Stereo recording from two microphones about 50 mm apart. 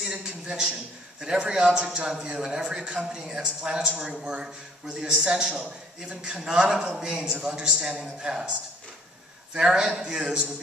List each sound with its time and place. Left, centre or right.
0.0 s a man's voice: centre
9.5 s a man's voice: centre